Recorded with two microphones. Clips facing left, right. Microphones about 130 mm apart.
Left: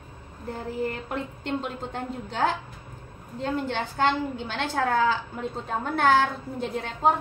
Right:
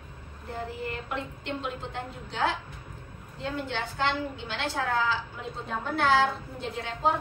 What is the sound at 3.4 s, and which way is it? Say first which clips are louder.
A woman's voice: left 4 dB; 45° left (ahead or behind).